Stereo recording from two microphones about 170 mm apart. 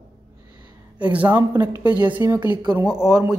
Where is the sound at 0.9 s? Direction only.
10° right (ahead or behind).